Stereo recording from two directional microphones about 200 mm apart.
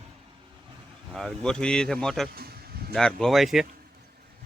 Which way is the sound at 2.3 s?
50° right (ahead or behind).